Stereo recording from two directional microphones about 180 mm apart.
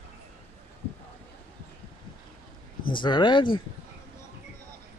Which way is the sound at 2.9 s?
25° left (ahead or behind).